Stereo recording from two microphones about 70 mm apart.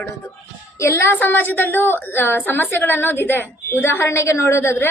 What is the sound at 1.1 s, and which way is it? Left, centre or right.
A woman's voice, left.